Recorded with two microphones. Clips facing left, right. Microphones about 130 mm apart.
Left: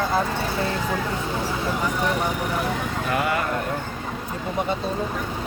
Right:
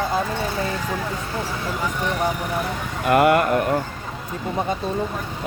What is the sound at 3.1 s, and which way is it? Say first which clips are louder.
Speech: right 9 dB; 60° right (ahead or behind).